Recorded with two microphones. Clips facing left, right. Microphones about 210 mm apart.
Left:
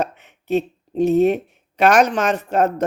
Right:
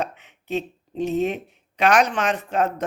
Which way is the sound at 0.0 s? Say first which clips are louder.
Left 4 dB; 45° left (ahead or behind).